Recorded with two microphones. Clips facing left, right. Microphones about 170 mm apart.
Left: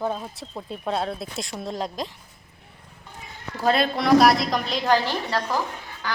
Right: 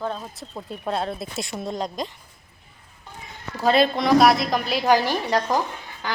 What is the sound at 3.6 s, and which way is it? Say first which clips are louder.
A woman's voice: right 3 dB; centre (ahead or behind).